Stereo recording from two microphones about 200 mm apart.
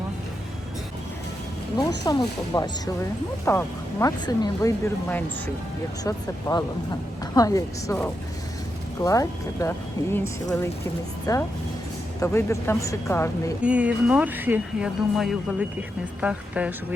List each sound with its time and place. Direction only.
1.8 s speech: 20° left (ahead or behind)
13.6 s speech: 5° right (ahead or behind)